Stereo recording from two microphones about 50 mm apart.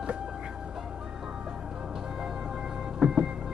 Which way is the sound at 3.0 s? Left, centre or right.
Centre.